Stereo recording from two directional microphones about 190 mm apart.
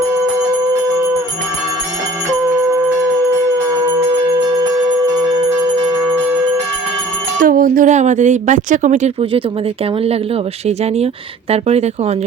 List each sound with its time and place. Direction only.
7.4 s speech: 45° right (ahead or behind)
10.7 s speech: 35° right (ahead or behind)